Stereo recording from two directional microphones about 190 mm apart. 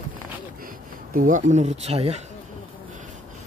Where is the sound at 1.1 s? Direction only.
45° right (ahead or behind).